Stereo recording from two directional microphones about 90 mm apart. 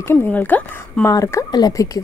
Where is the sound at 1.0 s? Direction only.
35° left (ahead or behind).